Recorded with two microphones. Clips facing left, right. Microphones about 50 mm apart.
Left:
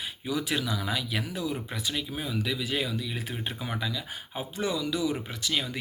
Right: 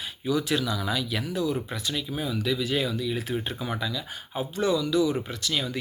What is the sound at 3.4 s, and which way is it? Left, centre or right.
Speech, centre.